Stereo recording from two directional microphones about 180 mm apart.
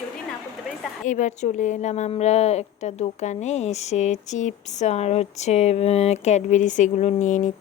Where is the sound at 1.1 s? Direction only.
40° left (ahead or behind).